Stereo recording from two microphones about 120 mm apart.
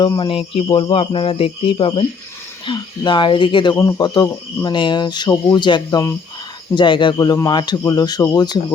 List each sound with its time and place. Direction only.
0.2 s speech: 50° left (ahead or behind)
3.8 s speech: 30° left (ahead or behind)